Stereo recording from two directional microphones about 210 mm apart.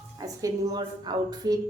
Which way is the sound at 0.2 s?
15° right (ahead or behind).